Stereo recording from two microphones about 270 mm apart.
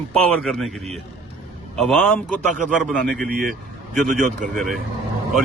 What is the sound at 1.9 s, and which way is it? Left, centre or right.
Speech, centre.